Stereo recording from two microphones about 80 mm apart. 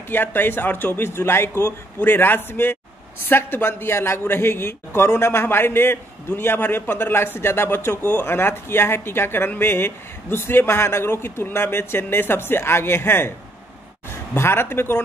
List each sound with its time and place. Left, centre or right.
0.1 s a man's voice: left
14.3 s speech: left